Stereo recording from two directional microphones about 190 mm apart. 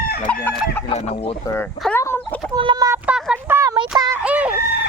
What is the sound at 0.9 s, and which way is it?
Speech, 30° left (ahead or behind).